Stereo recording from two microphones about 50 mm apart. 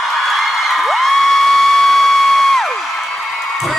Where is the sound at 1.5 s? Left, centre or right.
Centre.